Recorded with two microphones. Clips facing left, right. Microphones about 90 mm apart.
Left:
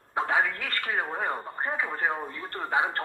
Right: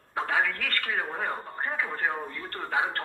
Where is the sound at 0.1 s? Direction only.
20° left (ahead or behind).